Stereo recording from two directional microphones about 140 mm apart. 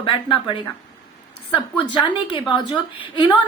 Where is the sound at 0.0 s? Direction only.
35° left (ahead or behind).